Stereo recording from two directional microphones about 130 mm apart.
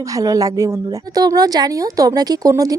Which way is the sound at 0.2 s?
25° right (ahead or behind).